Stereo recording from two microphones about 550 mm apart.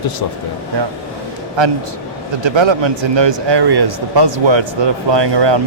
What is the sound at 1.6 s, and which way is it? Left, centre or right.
Speech, right.